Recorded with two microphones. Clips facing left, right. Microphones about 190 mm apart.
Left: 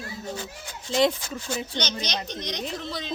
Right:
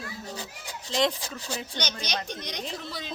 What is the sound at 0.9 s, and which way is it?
Speech, centre (ahead or behind).